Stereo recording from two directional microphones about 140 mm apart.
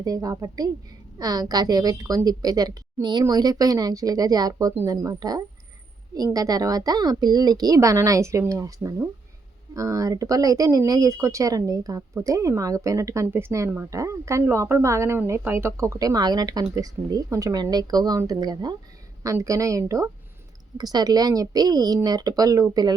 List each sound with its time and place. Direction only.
0.0 s speech: 25° right (ahead or behind)